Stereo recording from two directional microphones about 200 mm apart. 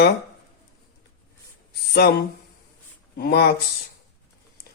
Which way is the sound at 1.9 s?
50° left (ahead or behind).